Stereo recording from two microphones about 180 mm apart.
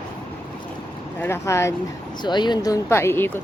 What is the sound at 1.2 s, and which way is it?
Speech, 15° left (ahead or behind).